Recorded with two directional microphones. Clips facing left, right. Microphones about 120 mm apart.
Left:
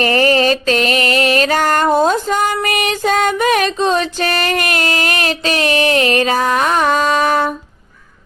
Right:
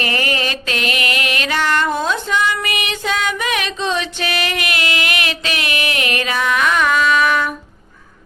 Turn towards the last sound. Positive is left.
turn(degrees=35)  # may be behind; listen again after turning